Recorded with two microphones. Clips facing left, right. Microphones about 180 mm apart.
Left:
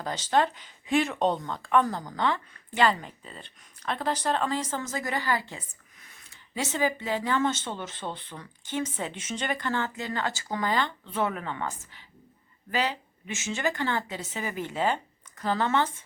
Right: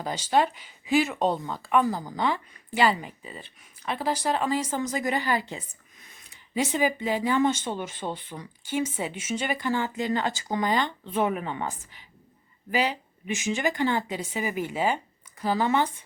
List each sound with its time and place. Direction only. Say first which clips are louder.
0.0 s speech: right 1 dB; 10° right (ahead or behind)